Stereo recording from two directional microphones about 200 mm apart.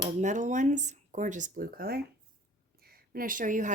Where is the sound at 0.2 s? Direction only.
35° right (ahead or behind).